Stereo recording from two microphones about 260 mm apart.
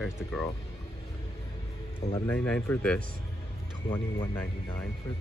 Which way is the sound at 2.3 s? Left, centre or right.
Centre.